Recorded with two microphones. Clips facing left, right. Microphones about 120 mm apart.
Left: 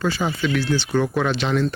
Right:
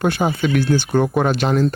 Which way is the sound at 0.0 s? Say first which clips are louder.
Right 4 dB; 55° right (ahead or behind).